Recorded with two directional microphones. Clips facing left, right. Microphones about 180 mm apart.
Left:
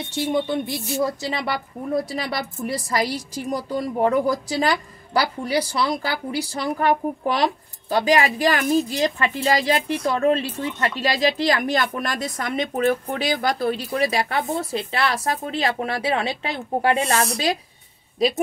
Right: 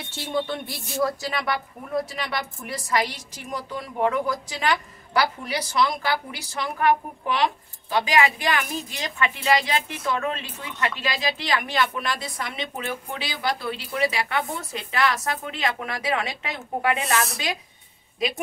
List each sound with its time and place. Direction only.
0.1 s a woman's voice: 20° left (ahead or behind)